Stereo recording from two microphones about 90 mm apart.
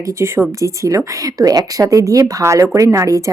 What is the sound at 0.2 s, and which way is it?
Speech, 30° right (ahead or behind).